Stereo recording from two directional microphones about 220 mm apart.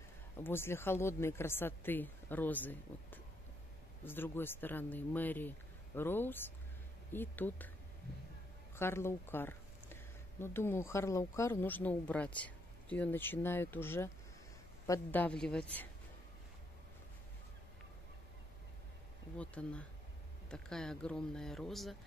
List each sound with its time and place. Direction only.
0.4 s speech: 10° left (ahead or behind)
8.7 s speech: 10° left (ahead or behind)
19.3 s speech: 5° left (ahead or behind)